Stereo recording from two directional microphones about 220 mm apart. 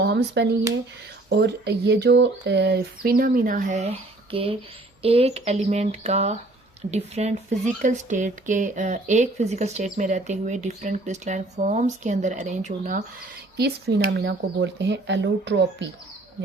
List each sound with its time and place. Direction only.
0.0 s a sound: 50° right (ahead or behind)
1.3 s speech: 50° right (ahead or behind)
13.6 s speech: 45° right (ahead or behind)